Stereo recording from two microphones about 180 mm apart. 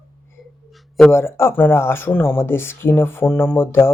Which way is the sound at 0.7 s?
Centre (ahead or behind).